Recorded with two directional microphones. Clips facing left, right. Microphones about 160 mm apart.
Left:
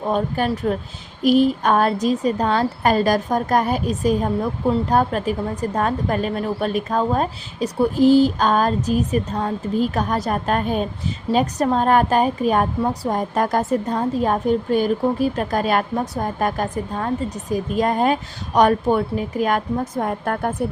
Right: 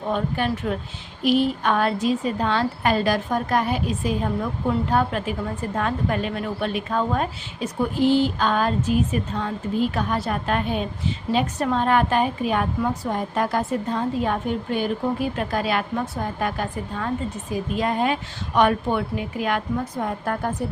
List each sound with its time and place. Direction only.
0.1 s a woman's voice: 40° left (ahead or behind)